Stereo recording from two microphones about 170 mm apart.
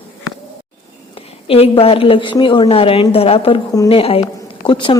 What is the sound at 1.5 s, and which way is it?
A woman's voice, 35° left (ahead or behind).